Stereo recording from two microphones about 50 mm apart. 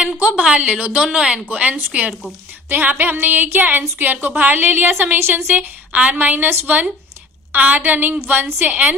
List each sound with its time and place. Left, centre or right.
0.2 s a sound: right
0.5 s speech: right
2.6 s a sound: right
3.0 s speech: right
5.5 s speech: right
8.6 s speech: right